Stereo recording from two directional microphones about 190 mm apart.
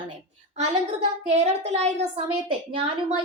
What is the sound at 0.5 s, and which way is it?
A woman's voice, 35° right (ahead or behind).